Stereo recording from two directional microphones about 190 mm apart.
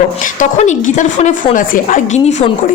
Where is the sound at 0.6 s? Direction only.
40° left (ahead or behind).